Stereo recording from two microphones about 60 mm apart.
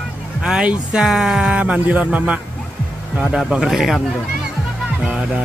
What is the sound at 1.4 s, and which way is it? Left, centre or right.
Speech, centre.